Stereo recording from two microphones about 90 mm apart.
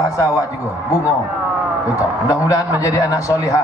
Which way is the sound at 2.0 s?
40° left (ahead or behind).